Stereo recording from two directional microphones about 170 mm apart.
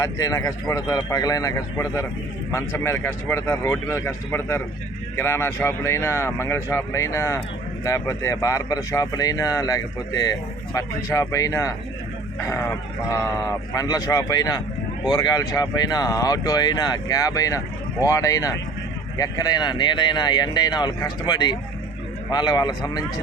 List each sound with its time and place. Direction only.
0.0 s speech: 20° left (ahead or behind)
13.1 s speech: 15° left (ahead or behind)